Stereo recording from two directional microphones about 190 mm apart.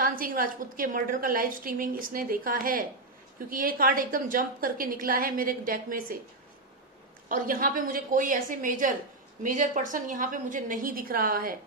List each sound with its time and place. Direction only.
0.0 s a woman's voice: 50° right (ahead or behind)
7.2 s a woman's voice: 45° right (ahead or behind)